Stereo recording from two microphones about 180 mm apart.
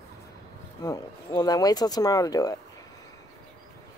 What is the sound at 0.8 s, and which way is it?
Speech, 20° left (ahead or behind).